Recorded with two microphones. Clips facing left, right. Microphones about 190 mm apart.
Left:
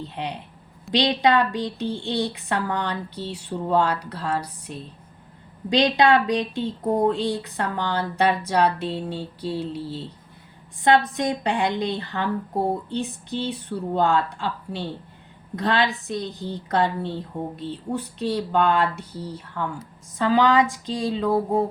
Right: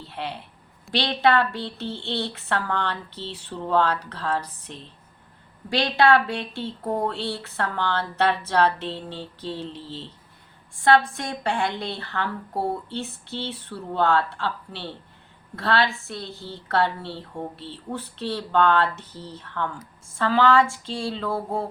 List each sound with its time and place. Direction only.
0.0 s a woman's voice: 15° left (ahead or behind)